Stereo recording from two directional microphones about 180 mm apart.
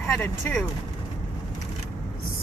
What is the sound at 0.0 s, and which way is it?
Speech, 5° left (ahead or behind).